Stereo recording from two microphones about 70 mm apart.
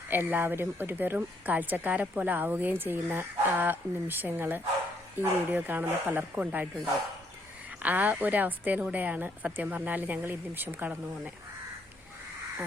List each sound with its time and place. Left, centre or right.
0.1 s speech: right
7.8 s speech: right